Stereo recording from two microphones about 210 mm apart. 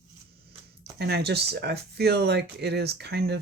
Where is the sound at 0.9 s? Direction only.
50° right (ahead or behind).